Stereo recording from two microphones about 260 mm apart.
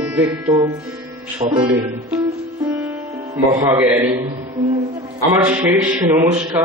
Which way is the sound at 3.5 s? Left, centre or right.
Centre.